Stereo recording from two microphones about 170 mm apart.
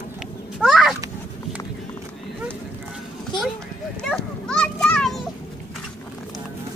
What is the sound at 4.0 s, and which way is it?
Children playing, 5° left (ahead or behind).